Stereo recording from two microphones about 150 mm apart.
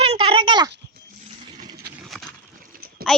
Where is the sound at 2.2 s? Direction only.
10° right (ahead or behind).